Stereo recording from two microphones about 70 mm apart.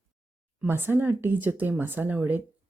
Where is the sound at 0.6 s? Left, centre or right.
Right.